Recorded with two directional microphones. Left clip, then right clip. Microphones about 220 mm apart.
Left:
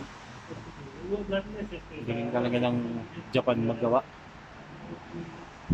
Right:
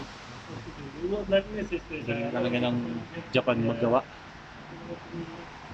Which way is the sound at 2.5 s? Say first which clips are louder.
Left 1 dB; 20° left (ahead or behind).